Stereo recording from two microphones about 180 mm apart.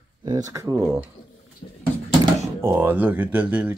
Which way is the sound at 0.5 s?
20° right (ahead or behind).